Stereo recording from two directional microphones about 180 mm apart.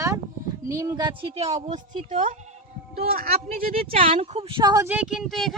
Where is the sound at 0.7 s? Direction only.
20° right (ahead or behind); by 1.5 s 35° right (ahead or behind).